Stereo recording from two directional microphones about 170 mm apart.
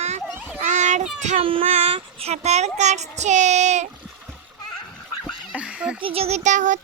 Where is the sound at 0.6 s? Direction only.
45° right (ahead or behind).